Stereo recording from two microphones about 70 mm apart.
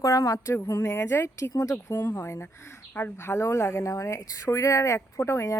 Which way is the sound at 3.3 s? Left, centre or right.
Left.